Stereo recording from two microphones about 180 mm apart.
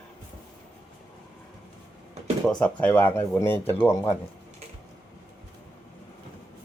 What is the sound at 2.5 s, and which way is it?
Speech, 5° left (ahead or behind).